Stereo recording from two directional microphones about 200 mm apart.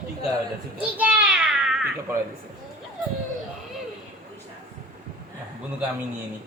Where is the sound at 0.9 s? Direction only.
10° right (ahead or behind).